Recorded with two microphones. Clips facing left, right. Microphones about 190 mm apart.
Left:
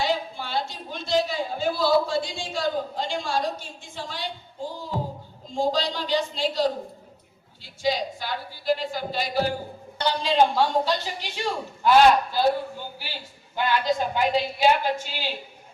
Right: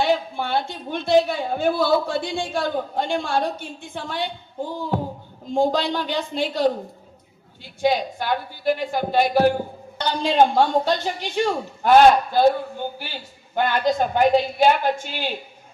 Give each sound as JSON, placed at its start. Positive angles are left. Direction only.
{"t": 0.0, "sound": "a woman's voice", "side_deg": -60}